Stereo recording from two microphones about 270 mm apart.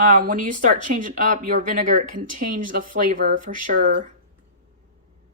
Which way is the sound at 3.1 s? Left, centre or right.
Right.